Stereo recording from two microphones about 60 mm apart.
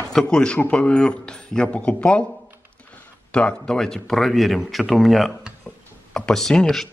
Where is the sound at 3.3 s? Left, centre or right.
Centre.